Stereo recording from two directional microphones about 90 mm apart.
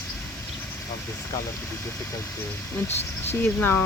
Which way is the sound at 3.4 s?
20° left (ahead or behind).